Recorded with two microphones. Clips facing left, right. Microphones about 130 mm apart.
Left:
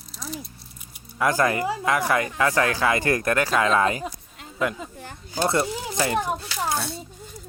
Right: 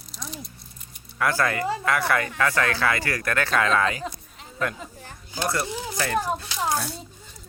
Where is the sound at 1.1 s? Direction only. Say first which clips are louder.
Left 2 dB; 15° left (ahead or behind).